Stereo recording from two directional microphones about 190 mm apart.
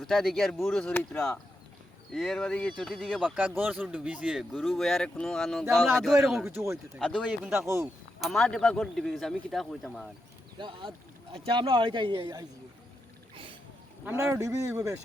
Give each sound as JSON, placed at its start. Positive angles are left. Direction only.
{"t": 0.0, "sound": "speech", "side_deg": 0}
{"t": 3.3, "sound": "speech", "side_deg": -10}
{"t": 6.4, "sound": "speech", "side_deg": -10}
{"t": 7.1, "sound": "speech", "side_deg": 5}
{"t": 10.6, "sound": "a man's voice", "side_deg": -25}
{"t": 13.3, "sound": "a sound", "side_deg": -25}
{"t": 14.0, "sound": "speech", "side_deg": -10}